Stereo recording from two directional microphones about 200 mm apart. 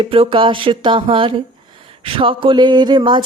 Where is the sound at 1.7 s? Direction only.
25° right (ahead or behind).